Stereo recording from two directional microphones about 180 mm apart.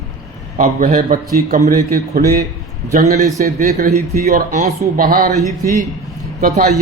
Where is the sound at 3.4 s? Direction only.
50° right (ahead or behind).